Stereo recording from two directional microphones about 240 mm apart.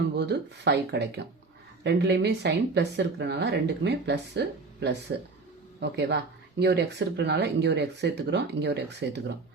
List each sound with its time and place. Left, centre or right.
0.2 s speech: right